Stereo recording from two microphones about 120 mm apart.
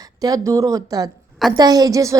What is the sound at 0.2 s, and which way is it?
A woman's voice, 30° right (ahead or behind).